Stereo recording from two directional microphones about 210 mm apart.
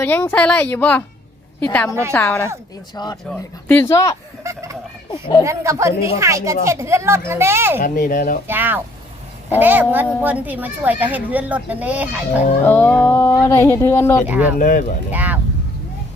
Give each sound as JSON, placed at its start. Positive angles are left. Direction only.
{"t": 0.0, "sound": "a woman's voice", "side_deg": 10}
{"t": 2.9, "sound": "a woman's voice", "side_deg": 20}
{"t": 4.4, "sound": "fowl", "side_deg": -15}
{"t": 5.4, "sound": "speech", "side_deg": -15}
{"t": 7.8, "sound": "speech", "side_deg": 40}
{"t": 8.4, "sound": "speech", "side_deg": -10}
{"t": 12.6, "sound": "a woman's voice", "side_deg": 10}
{"t": 14.3, "sound": "speech", "side_deg": -5}
{"t": 14.6, "sound": "speech", "side_deg": 40}
{"t": 15.1, "sound": "speech", "side_deg": -10}